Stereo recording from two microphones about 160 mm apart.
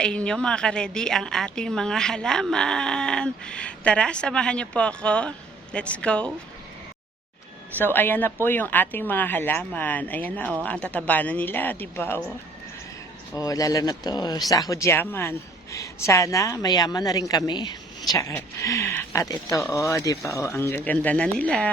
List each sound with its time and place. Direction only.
0.0 s a woman's voice: 5° left (ahead or behind)
7.8 s speech: 15° left (ahead or behind)
13.3 s a woman's voice: 20° left (ahead or behind)